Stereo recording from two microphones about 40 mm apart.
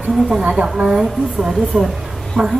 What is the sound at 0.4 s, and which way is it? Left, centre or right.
A woman's voice, right.